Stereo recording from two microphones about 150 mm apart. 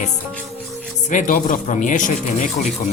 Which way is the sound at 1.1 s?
55° left (ahead or behind).